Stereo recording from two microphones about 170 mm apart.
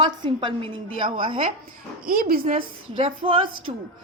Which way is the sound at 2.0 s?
60° right (ahead or behind).